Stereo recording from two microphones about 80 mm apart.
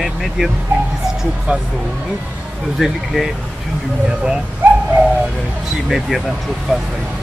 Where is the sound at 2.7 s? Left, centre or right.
Centre.